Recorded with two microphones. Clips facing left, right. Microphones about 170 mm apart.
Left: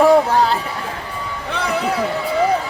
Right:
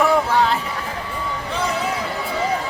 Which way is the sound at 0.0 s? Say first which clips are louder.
Left 5 dB; 35° left (ahead or behind).